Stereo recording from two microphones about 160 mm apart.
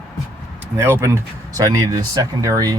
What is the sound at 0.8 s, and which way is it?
Speech, 20° right (ahead or behind).